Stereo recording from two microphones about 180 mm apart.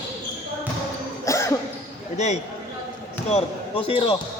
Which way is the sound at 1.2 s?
15° left (ahead or behind).